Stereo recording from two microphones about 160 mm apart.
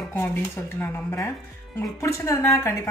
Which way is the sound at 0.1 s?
15° left (ahead or behind).